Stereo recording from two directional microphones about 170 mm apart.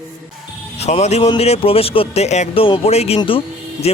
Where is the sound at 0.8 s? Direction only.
40° left (ahead or behind).